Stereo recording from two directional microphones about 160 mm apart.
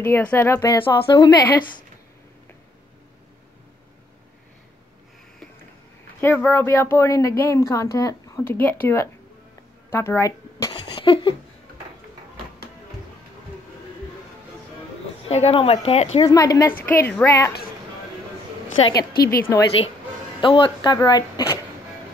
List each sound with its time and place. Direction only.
0.0 s speech: 10° left (ahead or behind)
6.2 s speech: 15° left (ahead or behind)
10.7 s a sound: 35° left (ahead or behind)
15.2 s speech: 40° left (ahead or behind)
16.3 s speech: 20° left (ahead or behind)
18.8 s speech: 30° left (ahead or behind)
20.3 s speech: 30° left (ahead or behind)